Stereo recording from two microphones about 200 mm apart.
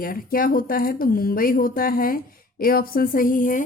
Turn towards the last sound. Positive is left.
turn(degrees=40)  # may be behind; listen again after turning